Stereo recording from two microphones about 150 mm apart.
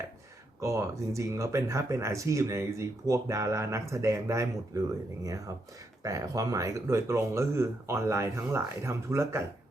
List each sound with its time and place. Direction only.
0.6 s speech: 20° right (ahead or behind)